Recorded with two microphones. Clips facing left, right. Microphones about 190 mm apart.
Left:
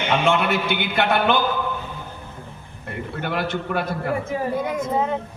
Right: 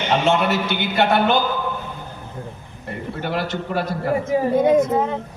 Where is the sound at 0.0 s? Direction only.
55° left (ahead or behind).